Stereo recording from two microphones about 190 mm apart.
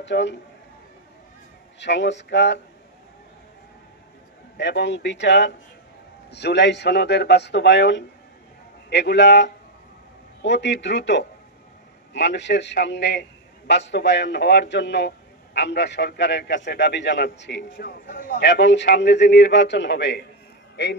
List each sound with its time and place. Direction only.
0.0 s a man's voice: 70° left (ahead or behind)
1.8 s a man's voice: 70° left (ahead or behind)
4.6 s a man's voice: 65° left (ahead or behind)